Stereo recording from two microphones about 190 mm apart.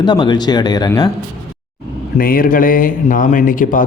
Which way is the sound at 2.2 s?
50° left (ahead or behind).